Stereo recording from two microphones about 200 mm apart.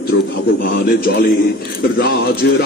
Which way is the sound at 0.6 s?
50° left (ahead or behind).